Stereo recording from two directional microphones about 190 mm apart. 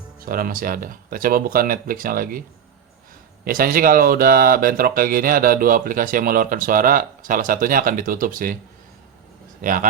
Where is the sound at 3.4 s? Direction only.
50° right (ahead or behind).